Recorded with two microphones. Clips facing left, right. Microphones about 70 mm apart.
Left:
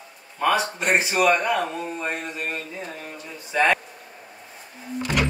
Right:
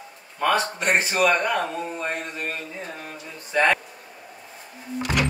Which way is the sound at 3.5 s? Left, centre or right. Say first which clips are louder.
Even; centre.